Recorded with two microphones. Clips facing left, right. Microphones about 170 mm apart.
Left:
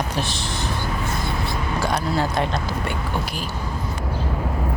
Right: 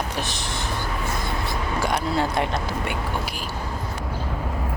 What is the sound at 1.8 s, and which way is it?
Speech, 20° right (ahead or behind).